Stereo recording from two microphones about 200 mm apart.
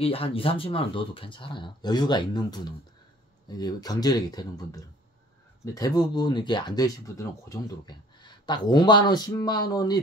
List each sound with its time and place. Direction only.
0.0 s speech: 30° left (ahead or behind)